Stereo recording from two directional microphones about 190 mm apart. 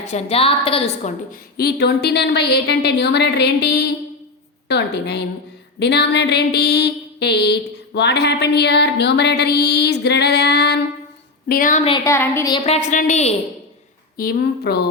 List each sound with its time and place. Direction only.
0.0 s a woman's voice: 35° left (ahead or behind)
1.3 s a sound: 55° left (ahead or behind)
11.4 s speech: 45° left (ahead or behind)
11.9 s a woman's voice: 20° left (ahead or behind)
12.6 s a woman's voice: 40° left (ahead or behind)
14.2 s a sound: 55° left (ahead or behind)